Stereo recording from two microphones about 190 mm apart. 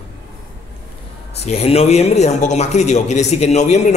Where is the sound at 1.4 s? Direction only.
30° left (ahead or behind).